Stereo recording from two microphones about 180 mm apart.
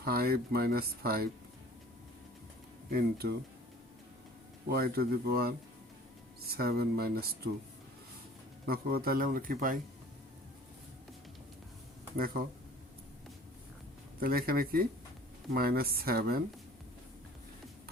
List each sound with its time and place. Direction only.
0.0 s speech: 55° right (ahead or behind)
2.9 s speech: 60° right (ahead or behind)
4.7 s speech: 60° right (ahead or behind)
8.6 s speech: 55° right (ahead or behind)
12.1 s speech: 55° right (ahead or behind)
14.2 s speech: 55° right (ahead or behind)